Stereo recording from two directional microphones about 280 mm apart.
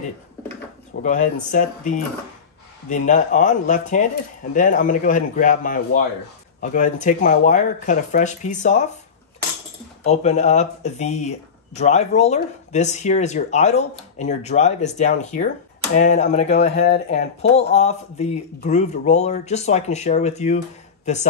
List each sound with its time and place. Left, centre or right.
1.0 s speech: left
2.9 s speech: left
10.0 s speech: left